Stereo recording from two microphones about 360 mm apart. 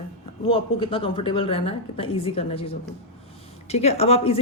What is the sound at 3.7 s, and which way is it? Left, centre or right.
Speech, centre.